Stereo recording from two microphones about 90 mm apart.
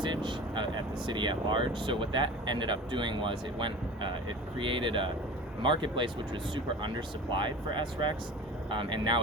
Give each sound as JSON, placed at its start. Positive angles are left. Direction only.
{"t": 0.0, "sound": "speech", "side_deg": -60}